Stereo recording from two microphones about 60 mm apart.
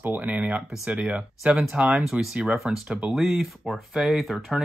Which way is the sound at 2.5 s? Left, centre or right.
Centre.